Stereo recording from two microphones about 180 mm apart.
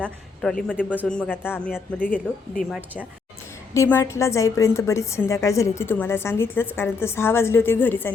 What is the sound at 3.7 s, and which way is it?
A woman's voice, 15° left (ahead or behind).